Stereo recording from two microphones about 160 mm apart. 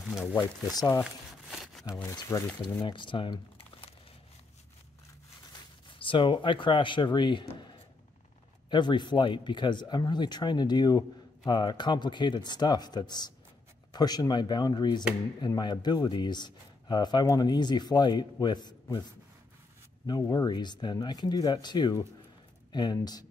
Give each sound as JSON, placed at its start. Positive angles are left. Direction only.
{"t": 0.2, "sound": "speech", "side_deg": 15}
{"t": 1.5, "sound": "wood", "side_deg": 0}
{"t": 2.0, "sound": "speech", "side_deg": 15}
{"t": 2.8, "sound": "speech", "side_deg": 30}
{"t": 5.9, "sound": "speech", "side_deg": 30}
{"t": 20.1, "sound": "speech", "side_deg": 25}